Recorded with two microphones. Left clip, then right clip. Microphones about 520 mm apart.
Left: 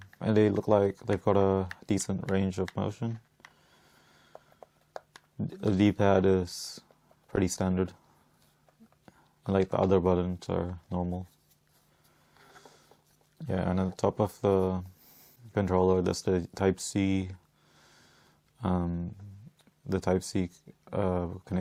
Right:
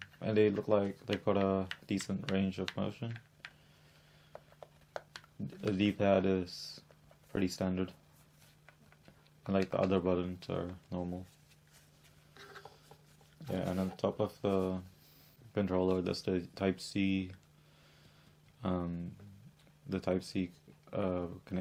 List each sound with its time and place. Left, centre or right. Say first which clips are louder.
0.2 s speech: left 4 dB; left
4.3 s a sound: left 1 dB; centre
5.5 s speech: left 7 dB; left
9.5 s speech: left 6 dB; left
13.5 s speech: left 5 dB; left
18.6 s speech: left 5 dB; left
19.9 s speech: left 6 dB; left